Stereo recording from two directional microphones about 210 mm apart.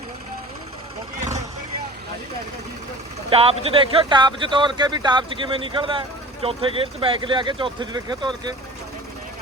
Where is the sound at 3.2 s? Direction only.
25° right (ahead or behind).